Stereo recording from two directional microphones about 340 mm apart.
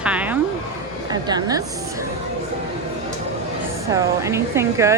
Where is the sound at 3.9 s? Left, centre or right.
Centre.